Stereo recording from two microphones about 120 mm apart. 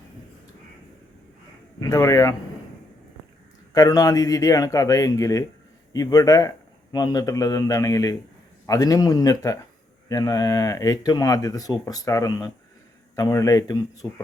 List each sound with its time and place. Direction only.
1.8 s speech: 30° left (ahead or behind)
3.8 s speech: 30° left (ahead or behind)